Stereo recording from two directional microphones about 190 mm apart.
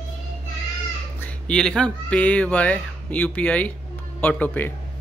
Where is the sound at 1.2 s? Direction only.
5° left (ahead or behind).